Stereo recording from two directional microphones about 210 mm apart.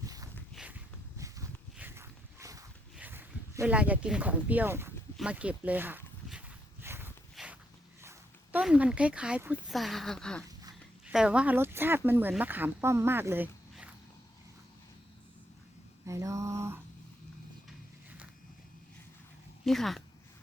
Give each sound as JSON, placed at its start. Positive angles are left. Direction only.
{"t": 0.0, "sound": "a sound", "side_deg": -15}
{"t": 0.5, "sound": "walk", "side_deg": -5}
{"t": 2.9, "sound": "speech", "side_deg": -10}
{"t": 6.8, "sound": "walk", "side_deg": -10}
{"t": 8.5, "sound": "speech", "side_deg": -5}
{"t": 16.0, "sound": "a sound", "side_deg": -15}
{"t": 19.6, "sound": "speech", "side_deg": 0}